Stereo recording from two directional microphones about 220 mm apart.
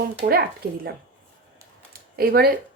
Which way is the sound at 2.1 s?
45° right (ahead or behind).